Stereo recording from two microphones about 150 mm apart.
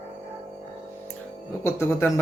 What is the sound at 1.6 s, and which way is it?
Speech, 15° left (ahead or behind).